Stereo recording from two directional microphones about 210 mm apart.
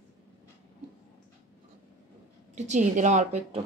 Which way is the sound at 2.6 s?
35° right (ahead or behind).